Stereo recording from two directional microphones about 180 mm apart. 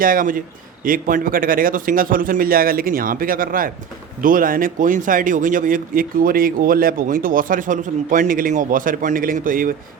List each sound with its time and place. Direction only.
0.0 s speech: 50° right (ahead or behind)